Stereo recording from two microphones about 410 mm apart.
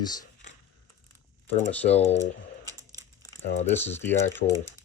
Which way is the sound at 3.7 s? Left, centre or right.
Centre.